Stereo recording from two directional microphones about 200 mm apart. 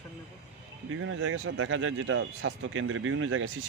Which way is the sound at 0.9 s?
80° right.